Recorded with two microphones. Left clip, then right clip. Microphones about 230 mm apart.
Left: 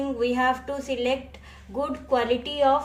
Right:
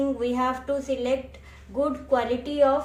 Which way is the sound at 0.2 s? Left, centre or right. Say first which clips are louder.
Left 3 dB; left.